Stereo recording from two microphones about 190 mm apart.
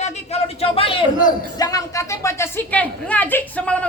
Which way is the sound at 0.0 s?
35° left (ahead or behind).